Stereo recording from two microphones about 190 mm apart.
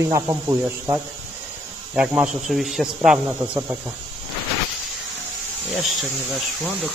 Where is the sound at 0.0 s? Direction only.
15° right (ahead or behind).